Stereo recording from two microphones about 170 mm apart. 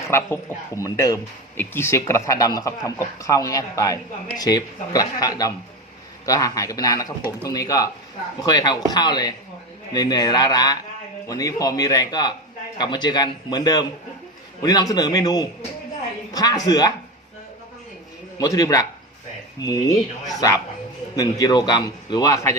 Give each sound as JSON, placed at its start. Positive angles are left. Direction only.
{"t": 0.1, "sound": "speech", "side_deg": 15}
{"t": 18.3, "sound": "speech", "side_deg": 20}
{"t": 21.2, "sound": "speech", "side_deg": 20}